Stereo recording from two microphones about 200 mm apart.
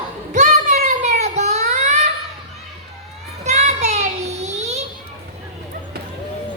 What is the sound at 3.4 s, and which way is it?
Child singing, 35° right (ahead or behind).